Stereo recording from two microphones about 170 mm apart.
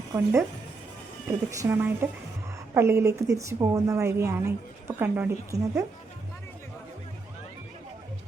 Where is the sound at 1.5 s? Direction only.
15° right (ahead or behind).